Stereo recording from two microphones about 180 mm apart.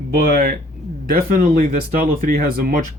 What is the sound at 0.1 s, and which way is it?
Speech, 50° right (ahead or behind).